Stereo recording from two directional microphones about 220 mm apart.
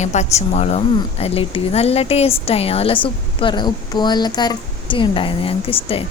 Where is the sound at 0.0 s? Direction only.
30° left (ahead or behind).